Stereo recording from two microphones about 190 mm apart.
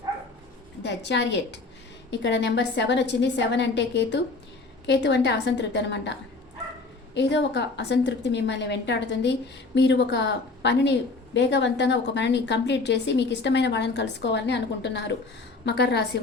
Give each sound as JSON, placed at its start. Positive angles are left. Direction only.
{"t": 0.8, "sound": "a woman's voice", "side_deg": 65}